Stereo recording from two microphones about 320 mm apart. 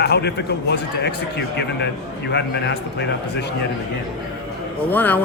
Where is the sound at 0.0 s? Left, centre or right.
Left.